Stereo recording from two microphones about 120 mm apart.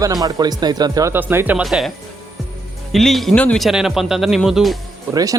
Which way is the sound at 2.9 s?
Centre (ahead or behind).